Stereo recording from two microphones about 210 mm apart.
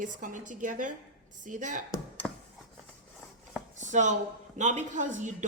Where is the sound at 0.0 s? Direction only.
40° right (ahead or behind).